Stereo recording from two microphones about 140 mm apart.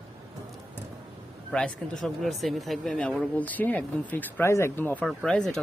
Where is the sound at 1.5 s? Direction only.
5° left (ahead or behind).